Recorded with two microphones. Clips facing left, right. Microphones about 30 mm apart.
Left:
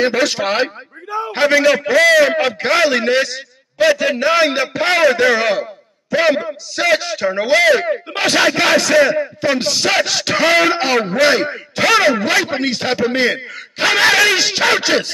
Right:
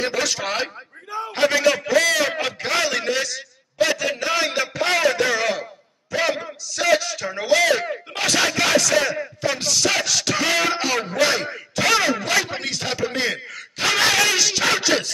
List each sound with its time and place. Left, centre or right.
0.0 s a man's voice: left